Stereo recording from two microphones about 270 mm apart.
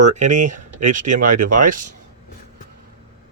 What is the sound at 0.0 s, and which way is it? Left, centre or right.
Speech, right.